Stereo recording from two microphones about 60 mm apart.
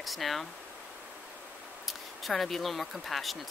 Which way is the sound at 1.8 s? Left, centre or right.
Centre.